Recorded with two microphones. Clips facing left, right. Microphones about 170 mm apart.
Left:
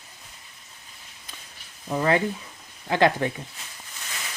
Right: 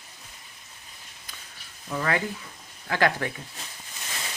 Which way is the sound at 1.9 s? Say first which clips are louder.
Left 5 dB; 25° left (ahead or behind).